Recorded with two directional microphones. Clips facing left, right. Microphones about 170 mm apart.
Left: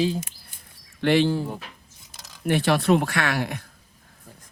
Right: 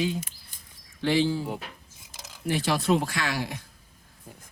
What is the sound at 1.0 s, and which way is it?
Speech, 65° left (ahead or behind).